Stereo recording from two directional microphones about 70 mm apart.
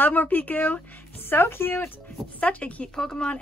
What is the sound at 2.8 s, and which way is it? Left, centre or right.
Speech, centre.